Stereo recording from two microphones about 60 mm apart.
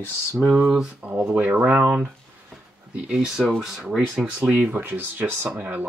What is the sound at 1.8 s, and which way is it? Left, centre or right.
Speech, right.